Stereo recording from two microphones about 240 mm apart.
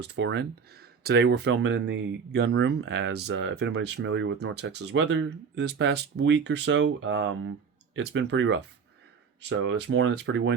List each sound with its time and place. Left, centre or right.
0.0 s speech: right